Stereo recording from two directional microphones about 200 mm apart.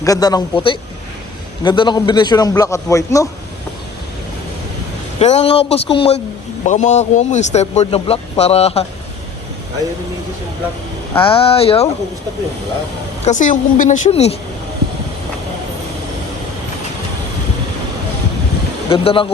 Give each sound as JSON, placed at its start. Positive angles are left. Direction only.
{"t": 0.0, "sound": "a man's voice", "side_deg": 20}
{"t": 5.2, "sound": "a man's voice", "side_deg": 30}
{"t": 11.2, "sound": "a man's voice", "side_deg": 25}
{"t": 13.2, "sound": "speech", "side_deg": 40}
{"t": 18.9, "sound": "a man's voice", "side_deg": 25}